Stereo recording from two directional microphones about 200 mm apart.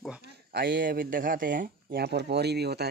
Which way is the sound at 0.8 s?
45° right (ahead or behind).